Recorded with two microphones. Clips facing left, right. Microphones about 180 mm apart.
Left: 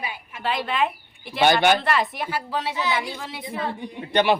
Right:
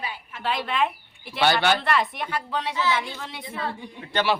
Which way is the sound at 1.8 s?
Centre (ahead or behind).